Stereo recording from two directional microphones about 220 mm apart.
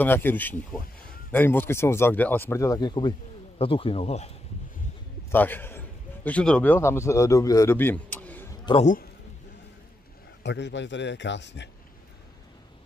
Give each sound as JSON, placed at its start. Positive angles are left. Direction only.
{"t": 0.0, "sound": "speech", "side_deg": 10}
{"t": 5.3, "sound": "a man's voice", "side_deg": 10}
{"t": 8.8, "sound": "a man's voice", "side_deg": 40}
{"t": 10.4, "sound": "a man's voice", "side_deg": 50}